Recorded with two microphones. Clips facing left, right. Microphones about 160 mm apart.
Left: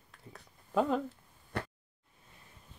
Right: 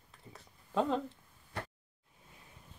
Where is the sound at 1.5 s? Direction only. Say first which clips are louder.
Left 4 dB; 65° left (ahead or behind).